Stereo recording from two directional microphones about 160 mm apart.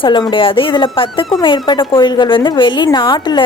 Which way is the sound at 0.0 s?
30° left (ahead or behind).